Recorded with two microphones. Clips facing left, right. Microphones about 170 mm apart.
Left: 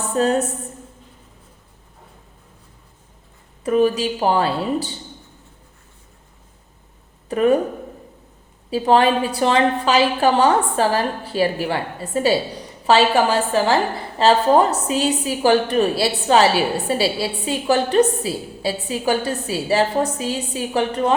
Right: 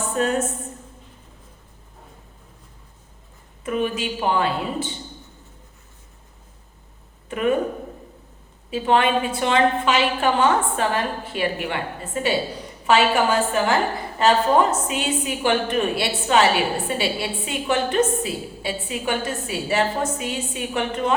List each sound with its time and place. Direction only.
0.2 s a woman's voice: 35° left (ahead or behind)
3.6 s a woman's voice: 35° left (ahead or behind)
7.3 s speech: 35° left (ahead or behind)
8.7 s a woman's voice: 35° left (ahead or behind)